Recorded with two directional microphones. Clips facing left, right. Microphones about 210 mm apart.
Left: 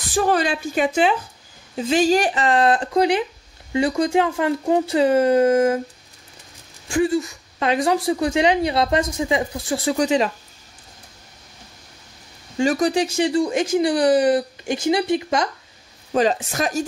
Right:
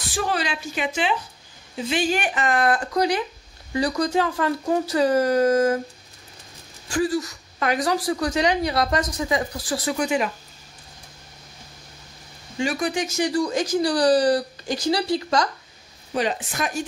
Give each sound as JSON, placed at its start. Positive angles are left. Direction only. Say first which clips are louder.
{"t": 0.1, "sound": "a woman's voice", "louder": "left 6 dB", "side_deg": 45}
{"t": 6.9, "sound": "a woman's voice", "louder": "left 3 dB", "side_deg": 25}
{"t": 12.5, "sound": "a woman's voice", "louder": "left 6 dB", "side_deg": 40}
{"t": 16.1, "sound": "speech", "louder": "left 5 dB", "side_deg": 40}